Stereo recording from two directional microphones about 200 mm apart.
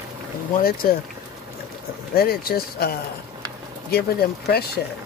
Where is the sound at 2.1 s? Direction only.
50° left (ahead or behind).